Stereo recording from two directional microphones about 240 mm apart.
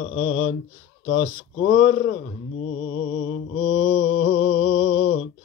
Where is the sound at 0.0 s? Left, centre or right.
Left.